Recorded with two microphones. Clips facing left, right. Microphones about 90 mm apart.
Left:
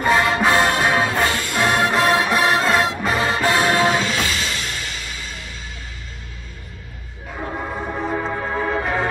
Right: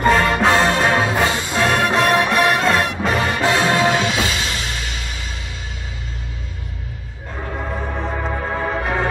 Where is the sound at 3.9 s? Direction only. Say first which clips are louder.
Right 2 dB; 15° right (ahead or behind).